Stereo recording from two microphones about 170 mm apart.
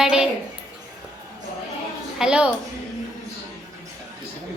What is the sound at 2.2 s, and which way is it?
Speech, 5° right (ahead or behind).